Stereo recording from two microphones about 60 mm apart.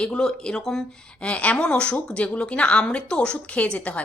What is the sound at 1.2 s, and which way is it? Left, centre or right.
Speech, left.